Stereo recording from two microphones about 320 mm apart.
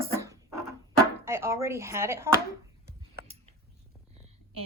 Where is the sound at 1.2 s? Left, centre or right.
Centre.